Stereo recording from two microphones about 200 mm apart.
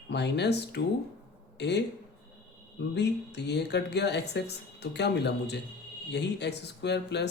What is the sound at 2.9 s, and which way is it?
Speech, 60° left (ahead or behind).